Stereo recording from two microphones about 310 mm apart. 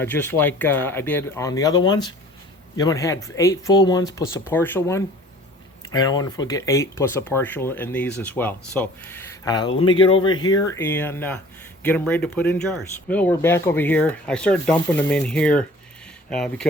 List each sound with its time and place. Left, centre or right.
0.0 s speech: centre